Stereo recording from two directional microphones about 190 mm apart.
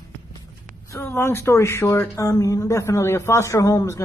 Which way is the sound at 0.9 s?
15° left (ahead or behind).